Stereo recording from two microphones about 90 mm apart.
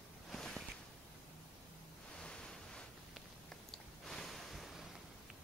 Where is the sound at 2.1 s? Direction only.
10° left (ahead or behind).